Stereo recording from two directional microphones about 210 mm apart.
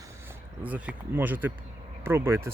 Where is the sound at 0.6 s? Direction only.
5° right (ahead or behind).